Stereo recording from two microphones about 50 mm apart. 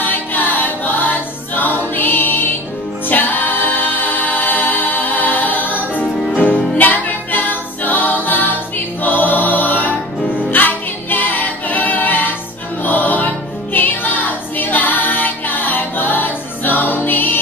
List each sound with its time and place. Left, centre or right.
0.0 s choir: left
3.1 s a capella: left
6.0 s music: centre
6.8 s music: left